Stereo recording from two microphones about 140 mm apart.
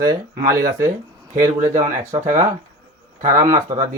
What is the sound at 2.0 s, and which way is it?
Speech, 20° right (ahead or behind).